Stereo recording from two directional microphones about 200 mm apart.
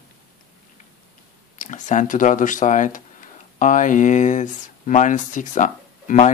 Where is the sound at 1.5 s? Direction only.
40° left (ahead or behind).